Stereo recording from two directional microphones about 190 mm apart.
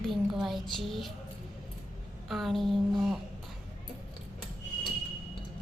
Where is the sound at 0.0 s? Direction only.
Centre (ahead or behind).